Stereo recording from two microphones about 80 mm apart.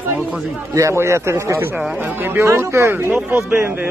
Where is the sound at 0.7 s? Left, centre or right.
Right.